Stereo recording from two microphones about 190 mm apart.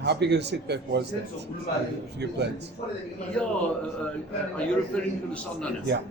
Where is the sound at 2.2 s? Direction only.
60° right (ahead or behind).